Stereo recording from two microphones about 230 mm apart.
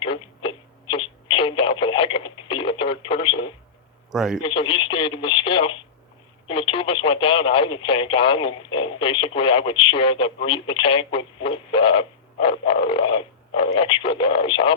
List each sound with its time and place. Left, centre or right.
0.0 s radio: left
4.1 s a man's voice: centre
4.4 s speech: left